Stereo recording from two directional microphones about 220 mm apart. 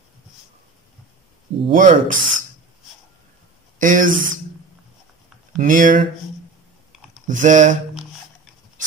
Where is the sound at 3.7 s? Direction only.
35° right (ahead or behind).